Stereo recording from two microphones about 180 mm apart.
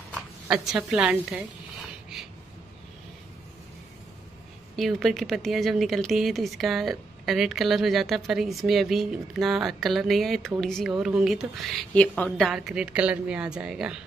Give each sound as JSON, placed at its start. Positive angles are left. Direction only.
{"t": 0.1, "sound": "speech", "side_deg": 0}
{"t": 4.7, "sound": "a woman's voice", "side_deg": 0}